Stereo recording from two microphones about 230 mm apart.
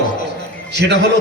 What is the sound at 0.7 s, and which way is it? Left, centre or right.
Speech, right.